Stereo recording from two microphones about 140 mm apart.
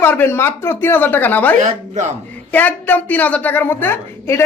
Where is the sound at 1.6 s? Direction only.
60° right (ahead or behind).